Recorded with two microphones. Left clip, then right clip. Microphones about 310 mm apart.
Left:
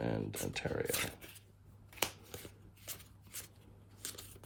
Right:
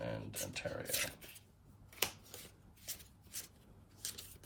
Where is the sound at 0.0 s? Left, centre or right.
Left.